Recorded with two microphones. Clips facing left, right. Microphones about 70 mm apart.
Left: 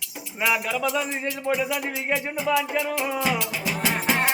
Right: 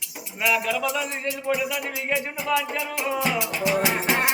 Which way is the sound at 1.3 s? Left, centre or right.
Left.